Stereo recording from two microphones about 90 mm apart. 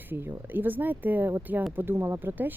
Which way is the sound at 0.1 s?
25° right (ahead or behind).